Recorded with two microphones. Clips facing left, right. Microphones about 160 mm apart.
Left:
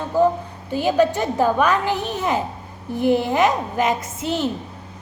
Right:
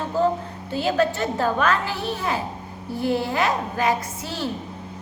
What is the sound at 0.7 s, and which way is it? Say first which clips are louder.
A woman's voice: left 4 dB; 15° left (ahead or behind).